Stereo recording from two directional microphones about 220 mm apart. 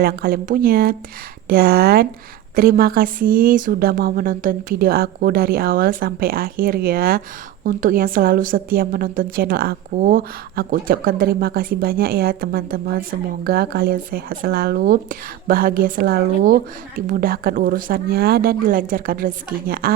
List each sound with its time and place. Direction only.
0.0 s a woman's voice: 45° right (ahead or behind)